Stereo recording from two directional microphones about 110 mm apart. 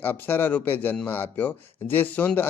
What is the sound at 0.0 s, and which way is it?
Speech, 20° left (ahead or behind).